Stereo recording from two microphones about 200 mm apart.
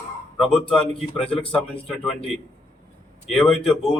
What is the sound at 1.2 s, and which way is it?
Speech, 30° left (ahead or behind).